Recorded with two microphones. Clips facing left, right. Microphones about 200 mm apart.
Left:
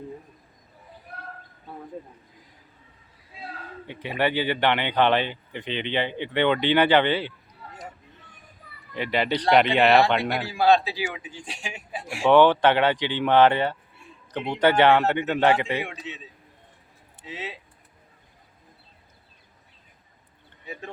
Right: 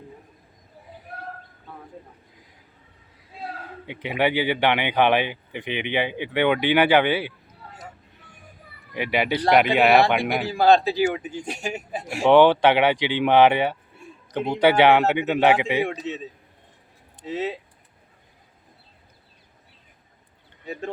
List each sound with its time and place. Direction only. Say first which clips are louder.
3.8 s speech: right 2 dB; 15° right (ahead or behind)
8.9 s speech: right 1 dB; 10° right (ahead or behind)
10.5 s speech: right 3 dB; 45° right (ahead or behind)
12.2 s speech: right 2 dB; 15° right (ahead or behind)
15.9 s speech: right 8 dB; 40° right (ahead or behind)
17.2 s speech: right 9 dB; 45° right (ahead or behind)